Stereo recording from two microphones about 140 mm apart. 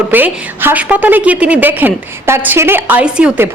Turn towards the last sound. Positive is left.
turn(degrees=-10)  # may be behind; listen again after turning